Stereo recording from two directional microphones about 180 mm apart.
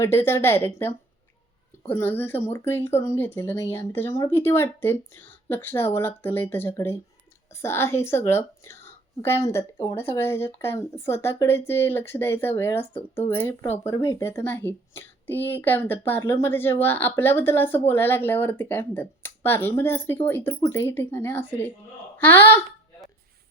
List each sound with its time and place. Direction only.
0.0 s speech: 15° left (ahead or behind)